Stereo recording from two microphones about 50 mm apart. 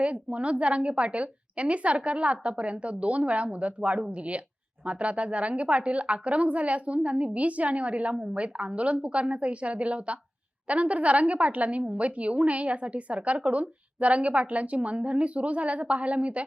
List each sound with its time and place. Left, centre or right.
0.0 s a woman's voice: right